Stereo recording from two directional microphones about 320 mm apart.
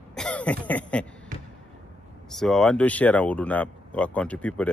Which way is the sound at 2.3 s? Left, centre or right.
Centre.